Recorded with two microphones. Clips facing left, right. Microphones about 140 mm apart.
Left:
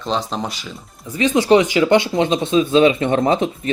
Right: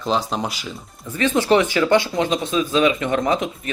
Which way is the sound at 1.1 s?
15° left (ahead or behind).